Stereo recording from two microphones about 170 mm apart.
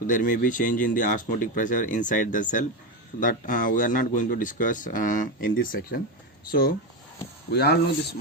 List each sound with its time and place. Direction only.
0.1 s speech: 50° left (ahead or behind)
5.5 s speech: 60° left (ahead or behind)
7.5 s speech: 70° left (ahead or behind)